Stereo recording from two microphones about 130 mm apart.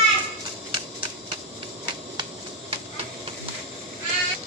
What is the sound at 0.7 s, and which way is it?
Typewriter, 40° right (ahead or behind).